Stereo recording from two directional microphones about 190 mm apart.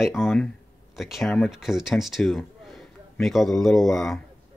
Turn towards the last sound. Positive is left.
turn(degrees=0)  # may be behind; listen again after turning